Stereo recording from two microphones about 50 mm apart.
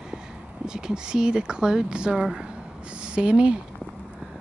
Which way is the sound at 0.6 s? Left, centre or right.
Centre.